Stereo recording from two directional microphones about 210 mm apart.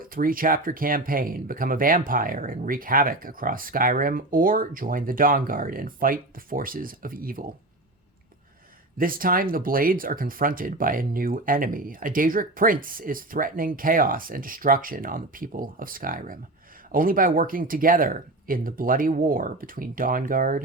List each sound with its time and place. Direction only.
0.0 s speech: 40° right (ahead or behind)
9.0 s speech: 45° right (ahead or behind)